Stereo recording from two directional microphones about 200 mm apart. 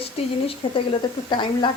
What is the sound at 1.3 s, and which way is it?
Speech, 25° left (ahead or behind).